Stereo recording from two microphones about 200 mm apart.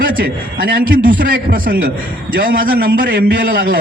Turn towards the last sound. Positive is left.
turn(degrees=-45)  # may be behind; listen again after turning